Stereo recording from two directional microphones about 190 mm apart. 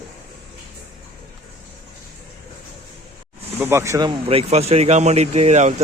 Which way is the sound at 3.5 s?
10° right (ahead or behind).